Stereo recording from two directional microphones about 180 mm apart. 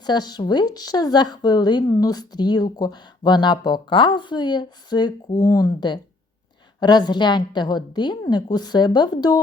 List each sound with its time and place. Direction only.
0.0 s speech: 25° left (ahead or behind)